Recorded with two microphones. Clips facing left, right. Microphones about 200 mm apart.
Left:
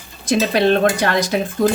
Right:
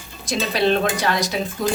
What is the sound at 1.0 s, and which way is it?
Speech, 55° left (ahead or behind).